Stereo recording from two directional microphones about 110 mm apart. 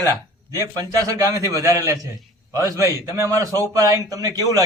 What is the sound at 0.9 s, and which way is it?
A man's voice, 30° right (ahead or behind).